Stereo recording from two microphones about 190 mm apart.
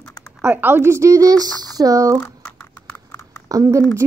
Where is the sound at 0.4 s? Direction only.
10° right (ahead or behind).